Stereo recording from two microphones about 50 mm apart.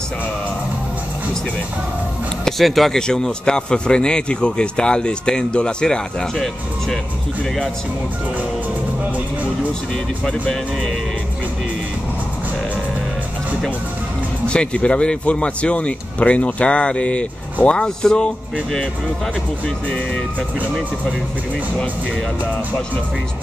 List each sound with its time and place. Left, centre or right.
2.4 s speech: centre
3.0 s a man's voice: centre
6.3 s a man's voice: centre
14.5 s speech: left